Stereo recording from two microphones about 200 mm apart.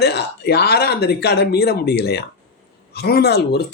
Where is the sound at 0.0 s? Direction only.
55° left (ahead or behind).